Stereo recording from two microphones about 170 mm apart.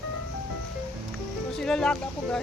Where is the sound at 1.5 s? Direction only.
5° left (ahead or behind).